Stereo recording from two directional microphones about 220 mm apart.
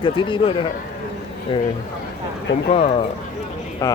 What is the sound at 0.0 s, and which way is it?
Speech, 20° left (ahead or behind).